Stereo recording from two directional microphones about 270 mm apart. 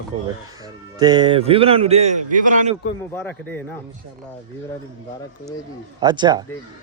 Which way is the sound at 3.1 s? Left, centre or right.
Centre.